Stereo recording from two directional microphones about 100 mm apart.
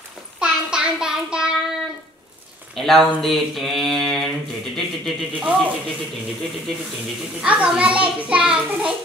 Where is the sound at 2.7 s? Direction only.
5° left (ahead or behind).